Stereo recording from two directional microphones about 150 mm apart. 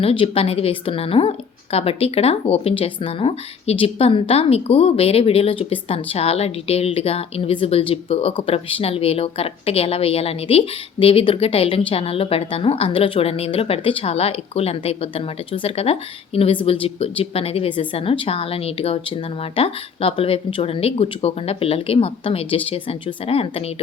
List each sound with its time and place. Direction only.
0.0 s a woman's voice: 40° left (ahead or behind)